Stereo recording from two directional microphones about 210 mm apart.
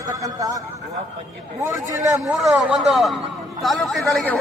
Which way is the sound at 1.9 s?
15° right (ahead or behind).